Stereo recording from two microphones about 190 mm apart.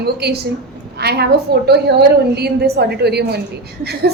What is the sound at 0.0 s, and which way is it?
A woman's voice, 60° right (ahead or behind).